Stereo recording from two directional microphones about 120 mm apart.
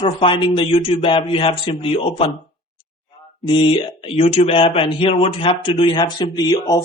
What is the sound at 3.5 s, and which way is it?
Speech, 45° left (ahead or behind).